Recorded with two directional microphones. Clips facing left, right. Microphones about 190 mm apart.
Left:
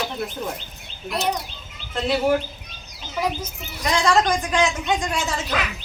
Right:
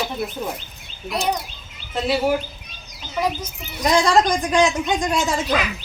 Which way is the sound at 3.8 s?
35° right (ahead or behind).